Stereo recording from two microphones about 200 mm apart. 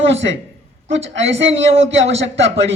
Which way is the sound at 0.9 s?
65° right (ahead or behind).